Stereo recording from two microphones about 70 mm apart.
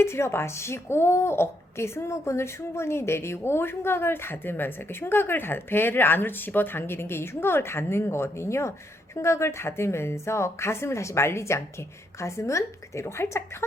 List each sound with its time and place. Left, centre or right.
0.0 s speech: left